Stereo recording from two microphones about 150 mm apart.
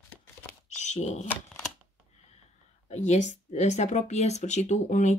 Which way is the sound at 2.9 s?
50° left (ahead or behind).